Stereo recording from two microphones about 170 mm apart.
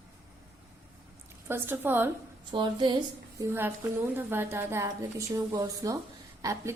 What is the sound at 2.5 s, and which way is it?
A woman's voice, 25° right (ahead or behind).